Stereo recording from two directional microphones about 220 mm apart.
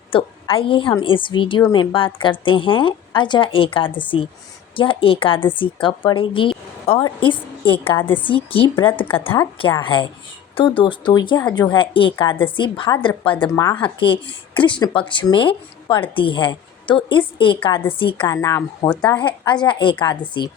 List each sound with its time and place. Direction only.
0.1 s speech: 25° left (ahead or behind)
7.9 s a woman's voice: 10° left (ahead or behind)
8.4 s a woman's voice: 25° left (ahead or behind)